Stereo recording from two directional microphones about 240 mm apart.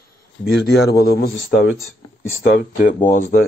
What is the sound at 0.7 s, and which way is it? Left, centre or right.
Speech, left.